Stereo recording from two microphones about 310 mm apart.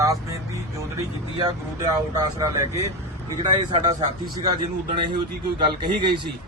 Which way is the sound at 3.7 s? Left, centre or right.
Centre.